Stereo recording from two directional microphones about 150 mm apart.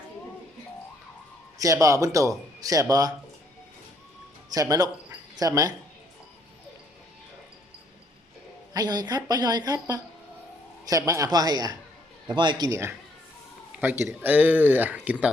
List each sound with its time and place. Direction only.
1.5 s a woman's voice: 20° right (ahead or behind)
4.5 s speech: 25° right (ahead or behind)
8.7 s a woman's voice: 25° right (ahead or behind)
13.8 s speech: 15° right (ahead or behind)